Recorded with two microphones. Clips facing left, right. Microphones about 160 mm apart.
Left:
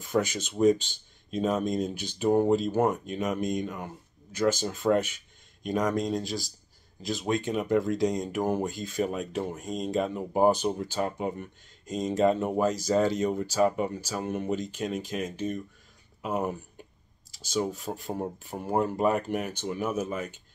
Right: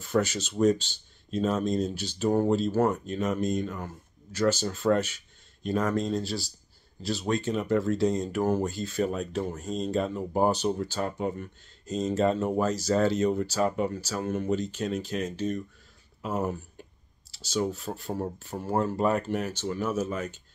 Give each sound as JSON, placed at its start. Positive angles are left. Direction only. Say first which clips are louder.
{"t": 0.0, "sound": "speech", "louder": "right 1 dB", "side_deg": 15}
{"t": 9.0, "sound": "speech", "louder": "right 1 dB", "side_deg": 5}
{"t": 9.4, "sound": "speech", "louder": "right 1 dB", "side_deg": 15}
{"t": 17.6, "sound": "speech", "louder": "right 1 dB", "side_deg": 10}